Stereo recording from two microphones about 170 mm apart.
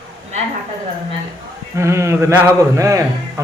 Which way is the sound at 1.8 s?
15° right (ahead or behind).